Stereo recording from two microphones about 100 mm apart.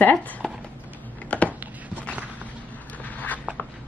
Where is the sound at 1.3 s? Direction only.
15° left (ahead or behind).